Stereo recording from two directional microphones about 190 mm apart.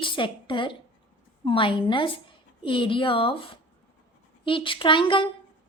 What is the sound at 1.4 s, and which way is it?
A woman's voice, 25° left (ahead or behind).